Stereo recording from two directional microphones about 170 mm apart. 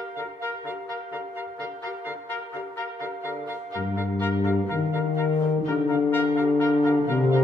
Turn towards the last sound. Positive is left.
turn(degrees=15)  # may be behind; listen again after turning